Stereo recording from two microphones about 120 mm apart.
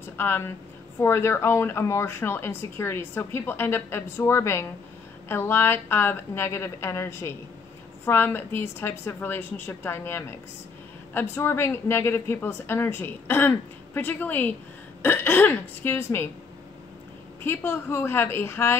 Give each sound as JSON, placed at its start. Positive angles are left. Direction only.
{"t": 0.2, "sound": "speech", "side_deg": 20}
{"t": 17.4, "sound": "speech", "side_deg": 20}